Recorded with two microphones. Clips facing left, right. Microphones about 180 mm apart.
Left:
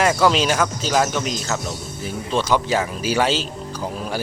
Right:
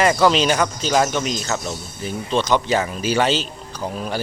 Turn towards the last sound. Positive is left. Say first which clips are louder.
# even
turn(degrees=5)  # may be behind; listen again after turning